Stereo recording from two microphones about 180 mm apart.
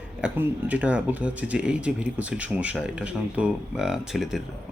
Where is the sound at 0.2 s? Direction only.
5° right (ahead or behind).